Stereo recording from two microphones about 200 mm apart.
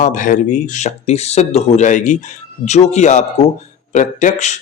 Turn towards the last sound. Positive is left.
turn(degrees=35)  # may be behind; listen again after turning